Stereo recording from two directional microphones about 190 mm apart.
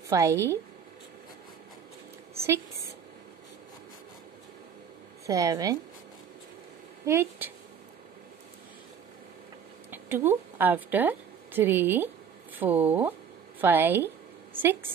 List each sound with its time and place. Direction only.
0.1 s a woman's voice: 15° right (ahead or behind)
5.2 s a woman's voice: 15° right (ahead or behind)
7.1 s a woman's voice: 10° right (ahead or behind)
9.8 s a woman's voice: 10° right (ahead or behind)
13.6 s a sound: 10° right (ahead or behind)